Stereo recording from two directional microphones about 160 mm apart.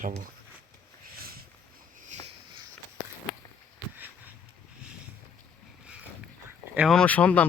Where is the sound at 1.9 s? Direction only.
50° right (ahead or behind).